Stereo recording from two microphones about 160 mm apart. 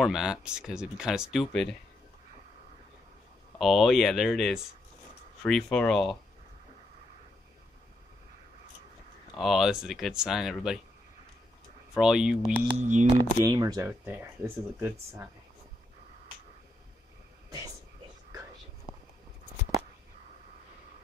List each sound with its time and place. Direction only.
0.0 s speech: 5° right (ahead or behind)
3.5 s speech: centre (ahead or behind)
9.3 s speech: centre (ahead or behind)
11.9 s speech: 5° right (ahead or behind)
12.7 s speech: 50° right (ahead or behind)
13.5 s speech: 25° right (ahead or behind)